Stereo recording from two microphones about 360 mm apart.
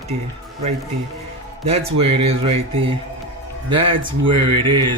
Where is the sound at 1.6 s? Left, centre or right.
Centre.